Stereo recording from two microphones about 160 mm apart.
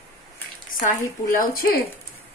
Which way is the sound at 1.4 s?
60° left (ahead or behind).